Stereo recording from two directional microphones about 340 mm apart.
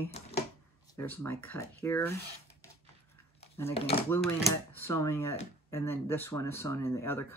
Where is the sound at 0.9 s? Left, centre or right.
Centre.